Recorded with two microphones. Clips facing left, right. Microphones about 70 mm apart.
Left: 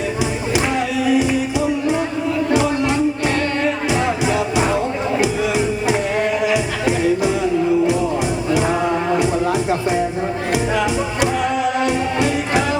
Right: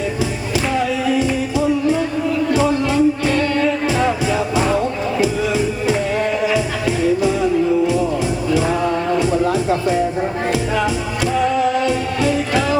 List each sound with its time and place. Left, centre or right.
1.0 s music: centre
8.4 s music: left